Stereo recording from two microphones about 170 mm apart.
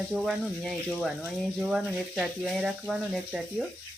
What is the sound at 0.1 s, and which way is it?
Speech, centre (ahead or behind).